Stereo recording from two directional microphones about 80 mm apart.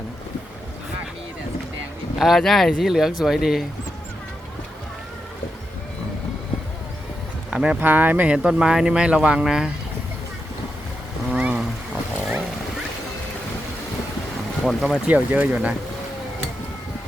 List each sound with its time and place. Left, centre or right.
2.1 s speech: centre
7.5 s speech: centre
11.3 s a sound: centre
14.6 s speech: centre
15.0 s speech: centre